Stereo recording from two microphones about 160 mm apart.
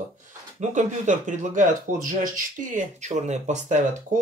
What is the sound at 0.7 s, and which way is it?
Speech, 50° right (ahead or behind).